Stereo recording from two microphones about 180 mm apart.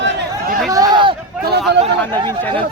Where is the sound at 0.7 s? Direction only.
20° right (ahead or behind).